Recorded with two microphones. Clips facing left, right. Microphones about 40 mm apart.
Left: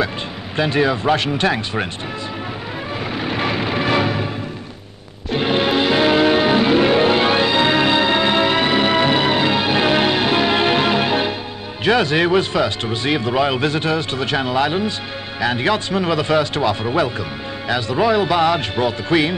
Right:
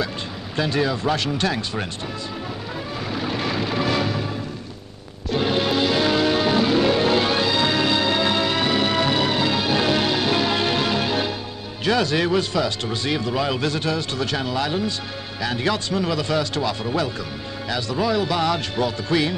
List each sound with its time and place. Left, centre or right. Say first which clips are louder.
0.6 s speech: left 5 dB; left
3.1 s music: left 4 dB; left
5.3 s music: left 3 dB; left
11.8 s speech: left 4 dB; left